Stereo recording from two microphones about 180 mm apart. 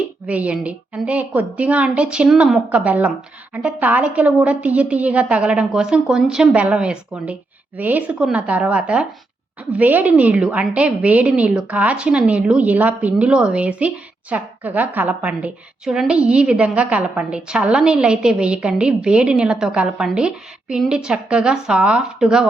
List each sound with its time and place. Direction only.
0.3 s a woman's voice: 5° right (ahead or behind)